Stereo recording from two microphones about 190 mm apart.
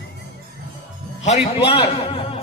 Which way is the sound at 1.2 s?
30° left (ahead or behind).